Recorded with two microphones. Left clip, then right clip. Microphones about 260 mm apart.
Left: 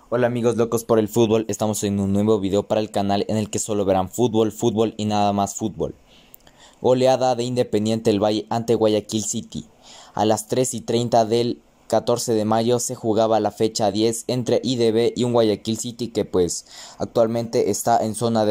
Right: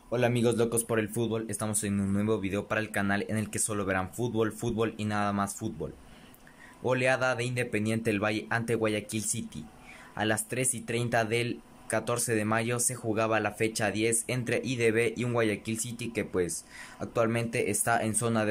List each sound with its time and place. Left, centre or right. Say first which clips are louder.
0.1 s speech: left 7 dB; centre